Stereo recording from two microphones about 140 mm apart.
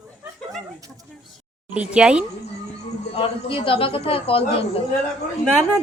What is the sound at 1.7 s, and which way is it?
Speech, 5° right (ahead or behind).